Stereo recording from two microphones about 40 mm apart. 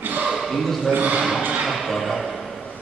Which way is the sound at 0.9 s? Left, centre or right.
Right.